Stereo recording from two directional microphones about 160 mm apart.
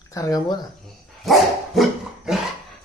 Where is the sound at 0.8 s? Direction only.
Centre (ahead or behind).